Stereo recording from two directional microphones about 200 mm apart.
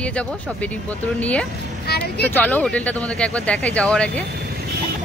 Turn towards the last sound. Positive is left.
turn(degrees=5)  # may be behind; listen again after turning